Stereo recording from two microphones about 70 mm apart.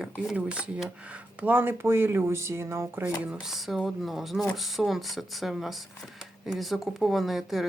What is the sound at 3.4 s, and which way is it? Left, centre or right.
Speech, centre.